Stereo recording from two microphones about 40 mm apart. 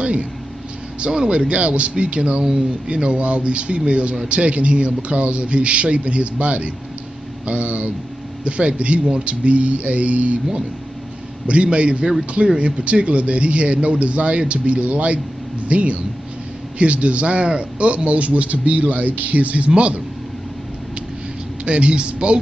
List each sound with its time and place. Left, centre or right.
0.0 s a man's voice: right
11.4 s a man's voice: right
21.6 s speech: right